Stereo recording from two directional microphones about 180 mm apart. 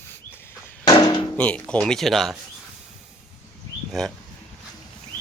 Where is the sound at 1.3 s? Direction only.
5° left (ahead or behind).